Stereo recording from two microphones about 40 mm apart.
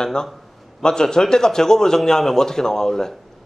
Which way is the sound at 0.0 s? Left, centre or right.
Centre.